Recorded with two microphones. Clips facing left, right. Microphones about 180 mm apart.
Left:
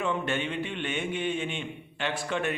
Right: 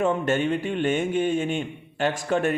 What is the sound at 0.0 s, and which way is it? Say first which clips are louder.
A man's voice: right 7 dB; 45° right (ahead or behind).